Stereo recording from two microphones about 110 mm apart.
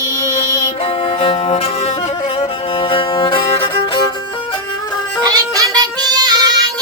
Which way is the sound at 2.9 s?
50° left (ahead or behind).